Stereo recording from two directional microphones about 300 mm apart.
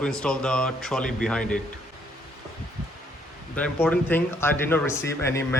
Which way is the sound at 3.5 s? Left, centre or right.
Centre.